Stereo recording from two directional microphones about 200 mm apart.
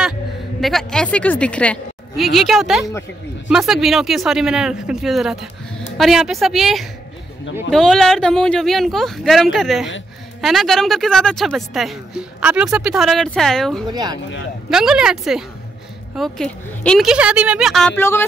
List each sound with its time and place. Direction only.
0.6 s a woman's voice: centre (ahead or behind)
13.8 s speech: 20° right (ahead or behind)
14.7 s a woman's voice: 5° right (ahead or behind)